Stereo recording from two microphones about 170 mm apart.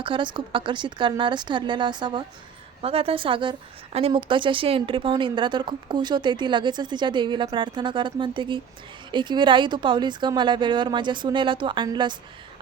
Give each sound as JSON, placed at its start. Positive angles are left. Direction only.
{"t": 0.0, "sound": "a woman's voice", "side_deg": -30}